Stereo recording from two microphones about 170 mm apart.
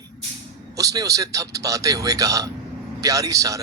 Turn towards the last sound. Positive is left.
turn(degrees=-20)  # may be behind; listen again after turning